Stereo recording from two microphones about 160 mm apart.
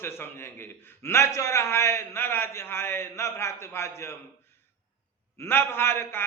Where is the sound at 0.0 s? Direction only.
15° left (ahead or behind).